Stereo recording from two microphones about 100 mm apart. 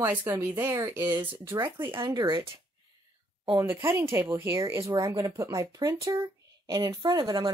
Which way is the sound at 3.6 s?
25° right (ahead or behind).